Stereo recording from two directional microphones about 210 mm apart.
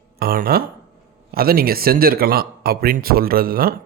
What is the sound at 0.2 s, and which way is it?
Speech, 45° right (ahead or behind).